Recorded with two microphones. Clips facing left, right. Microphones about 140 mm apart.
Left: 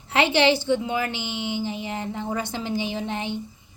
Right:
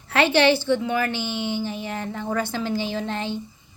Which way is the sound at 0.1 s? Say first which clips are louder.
Right 2 dB; 20° left (ahead or behind).